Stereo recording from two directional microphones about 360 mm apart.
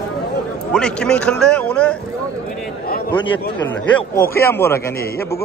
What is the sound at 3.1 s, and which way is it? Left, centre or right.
A man's voice, centre.